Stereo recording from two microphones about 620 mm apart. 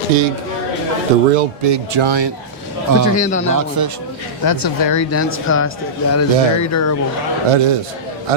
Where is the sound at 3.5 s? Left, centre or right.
Right.